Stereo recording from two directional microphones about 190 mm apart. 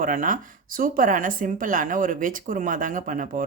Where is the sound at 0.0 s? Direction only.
45° right (ahead or behind).